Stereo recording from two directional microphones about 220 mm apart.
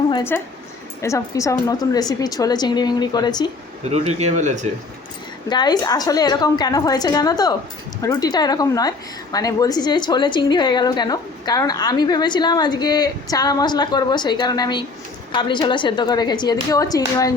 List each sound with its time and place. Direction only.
0.1 s a woman's voice: 15° left (ahead or behind)
3.8 s speech: 30° right (ahead or behind)
5.5 s a woman's voice: 20° left (ahead or behind)